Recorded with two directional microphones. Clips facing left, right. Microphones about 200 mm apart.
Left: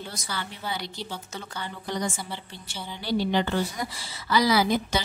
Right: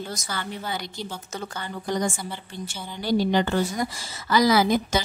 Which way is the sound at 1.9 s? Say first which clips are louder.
Right 4 dB; 45° right (ahead or behind).